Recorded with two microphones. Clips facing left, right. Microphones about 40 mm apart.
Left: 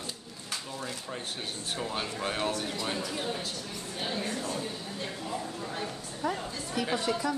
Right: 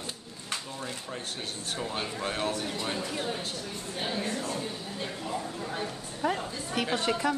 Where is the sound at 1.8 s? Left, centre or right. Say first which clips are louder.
Even; centre.